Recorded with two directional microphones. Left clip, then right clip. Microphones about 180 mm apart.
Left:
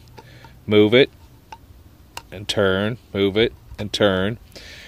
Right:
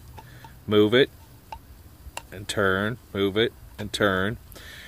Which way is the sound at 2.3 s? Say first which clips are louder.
Left 4 dB; 30° left (ahead or behind).